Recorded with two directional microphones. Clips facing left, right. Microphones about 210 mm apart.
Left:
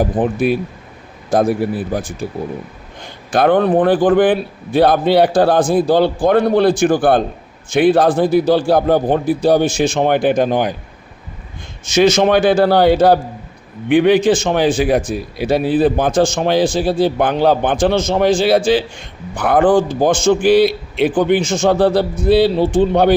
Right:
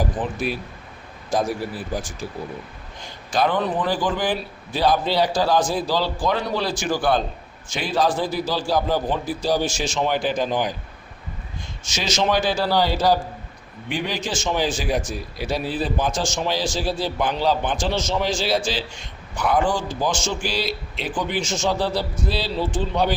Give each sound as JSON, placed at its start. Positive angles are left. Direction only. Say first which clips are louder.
{"t": 0.0, "sound": "speech", "louder": "left 9 dB", "side_deg": 60}
{"t": 11.9, "sound": "speech", "louder": "left 11 dB", "side_deg": 55}